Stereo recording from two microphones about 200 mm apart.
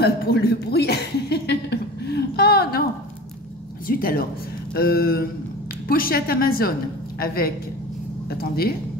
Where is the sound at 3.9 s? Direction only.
45° left (ahead or behind).